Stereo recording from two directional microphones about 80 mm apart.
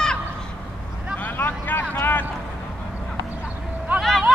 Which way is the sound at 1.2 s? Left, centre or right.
Left.